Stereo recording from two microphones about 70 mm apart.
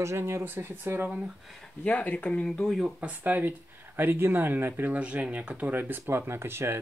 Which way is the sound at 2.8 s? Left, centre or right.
Right.